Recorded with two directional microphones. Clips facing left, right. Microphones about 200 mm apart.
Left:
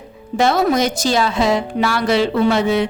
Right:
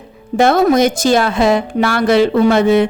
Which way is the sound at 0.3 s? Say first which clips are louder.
Right 5 dB; 50° right (ahead or behind).